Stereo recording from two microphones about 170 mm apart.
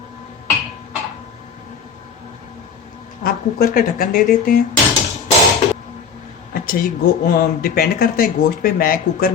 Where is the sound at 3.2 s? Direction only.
60° left (ahead or behind).